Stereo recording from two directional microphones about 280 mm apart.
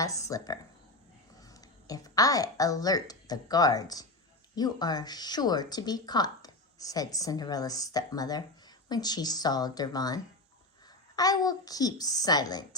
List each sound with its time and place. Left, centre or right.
0.0 s speech: centre
11.2 s speech: centre